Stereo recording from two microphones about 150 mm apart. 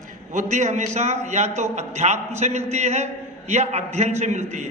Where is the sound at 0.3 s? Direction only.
50° right (ahead or behind).